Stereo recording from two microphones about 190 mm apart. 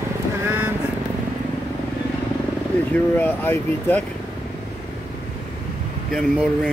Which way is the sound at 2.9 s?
10° left (ahead or behind).